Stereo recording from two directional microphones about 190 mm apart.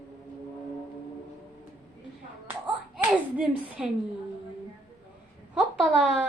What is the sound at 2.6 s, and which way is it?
Hands, 5° right (ahead or behind).